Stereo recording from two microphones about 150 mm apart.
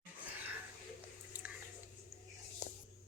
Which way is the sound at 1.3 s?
10° right (ahead or behind).